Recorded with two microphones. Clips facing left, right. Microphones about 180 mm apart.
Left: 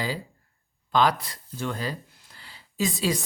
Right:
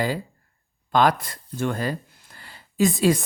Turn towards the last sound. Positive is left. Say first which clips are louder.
# right 7 dB
turn(degrees=-50)  # may be behind; listen again after turning